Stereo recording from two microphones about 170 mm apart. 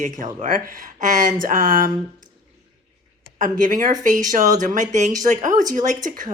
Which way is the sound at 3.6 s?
50° right (ahead or behind).